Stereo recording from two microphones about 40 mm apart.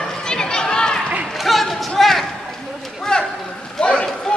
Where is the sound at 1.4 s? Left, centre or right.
Centre.